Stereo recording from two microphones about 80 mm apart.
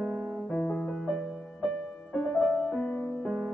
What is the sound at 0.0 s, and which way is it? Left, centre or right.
Music, centre.